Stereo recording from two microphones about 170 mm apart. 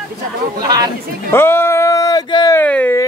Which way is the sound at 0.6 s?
25° right (ahead or behind).